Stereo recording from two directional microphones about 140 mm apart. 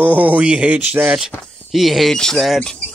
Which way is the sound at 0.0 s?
10° right (ahead or behind).